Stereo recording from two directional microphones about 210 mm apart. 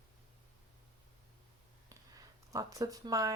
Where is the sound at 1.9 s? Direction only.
15° right (ahead or behind).